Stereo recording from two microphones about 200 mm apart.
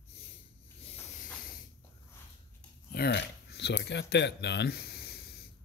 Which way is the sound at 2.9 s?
55° left (ahead or behind).